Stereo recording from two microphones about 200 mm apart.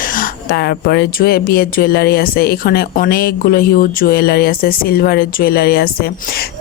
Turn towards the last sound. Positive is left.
turn(degrees=50)  # may be behind; listen again after turning